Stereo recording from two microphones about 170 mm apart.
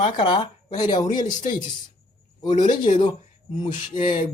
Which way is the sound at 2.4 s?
25° left (ahead or behind).